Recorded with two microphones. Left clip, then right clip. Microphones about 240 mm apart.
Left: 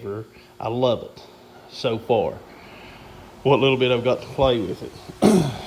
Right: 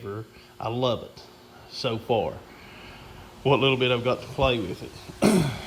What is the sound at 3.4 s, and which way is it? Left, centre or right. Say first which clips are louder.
Speech: left 4 dB; centre.